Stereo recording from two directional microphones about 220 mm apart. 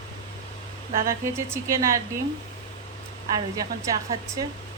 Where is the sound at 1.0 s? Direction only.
15° right (ahead or behind).